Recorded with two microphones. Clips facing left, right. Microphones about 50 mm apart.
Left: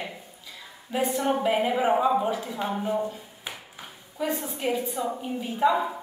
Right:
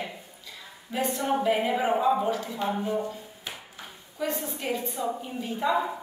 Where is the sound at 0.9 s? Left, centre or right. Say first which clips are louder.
Left 2 dB; centre.